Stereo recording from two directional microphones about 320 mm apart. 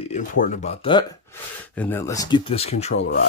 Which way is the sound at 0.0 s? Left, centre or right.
Left.